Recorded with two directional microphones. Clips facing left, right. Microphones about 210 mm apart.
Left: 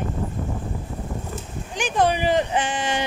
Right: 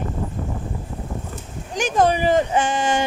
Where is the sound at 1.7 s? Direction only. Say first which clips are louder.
Right 3 dB; 45° right (ahead or behind).